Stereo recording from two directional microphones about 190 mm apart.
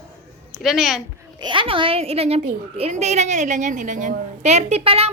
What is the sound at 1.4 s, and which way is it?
A child's voice, 25° right (ahead or behind).